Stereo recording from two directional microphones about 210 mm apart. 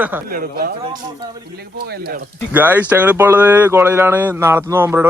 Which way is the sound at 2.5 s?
10° right (ahead or behind).